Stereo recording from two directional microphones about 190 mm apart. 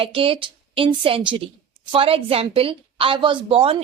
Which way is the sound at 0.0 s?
30° right (ahead or behind).